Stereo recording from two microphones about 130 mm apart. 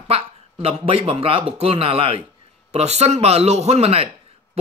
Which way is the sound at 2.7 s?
55° right (ahead or behind).